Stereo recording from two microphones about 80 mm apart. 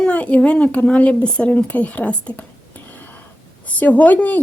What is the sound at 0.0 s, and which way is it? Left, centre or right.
Speech, centre.